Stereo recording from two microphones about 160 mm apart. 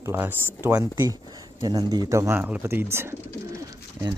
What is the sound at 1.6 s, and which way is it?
Speech, 25° right (ahead or behind).